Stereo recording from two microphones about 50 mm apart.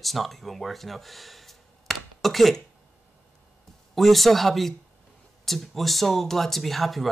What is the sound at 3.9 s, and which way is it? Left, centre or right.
Speech, centre.